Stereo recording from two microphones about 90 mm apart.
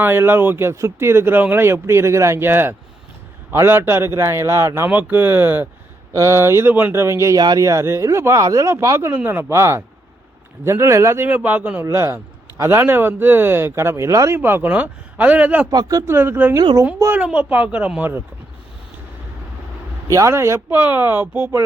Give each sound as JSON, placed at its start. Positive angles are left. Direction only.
{"t": 0.0, "sound": "speech", "side_deg": -25}
{"t": 4.9, "sound": "speech", "side_deg": -20}
{"t": 6.1, "sound": "speech", "side_deg": -35}
{"t": 7.3, "sound": "speech", "side_deg": -45}
{"t": 11.3, "sound": "speech", "side_deg": -20}
{"t": 14.3, "sound": "a man's voice", "side_deg": -25}
{"t": 15.7, "sound": "speech", "side_deg": -45}
{"t": 16.0, "sound": "a man's voice", "side_deg": -25}
{"t": 20.1, "sound": "speech", "side_deg": -35}